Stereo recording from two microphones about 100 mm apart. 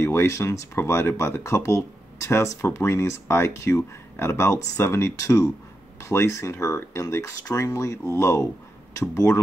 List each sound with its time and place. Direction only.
0.0 s speech: 25° left (ahead or behind)